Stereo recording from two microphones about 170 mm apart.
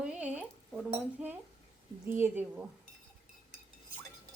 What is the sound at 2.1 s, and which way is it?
Speech, 10° right (ahead or behind).